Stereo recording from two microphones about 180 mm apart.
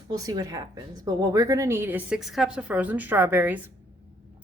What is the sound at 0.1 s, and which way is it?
Speech, 20° right (ahead or behind).